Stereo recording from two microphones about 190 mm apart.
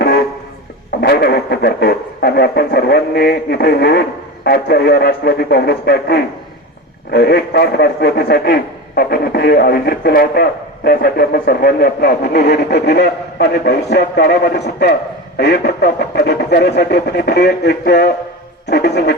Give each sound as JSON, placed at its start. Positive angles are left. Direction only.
{"t": 1.0, "sound": "a man's voice", "side_deg": 55}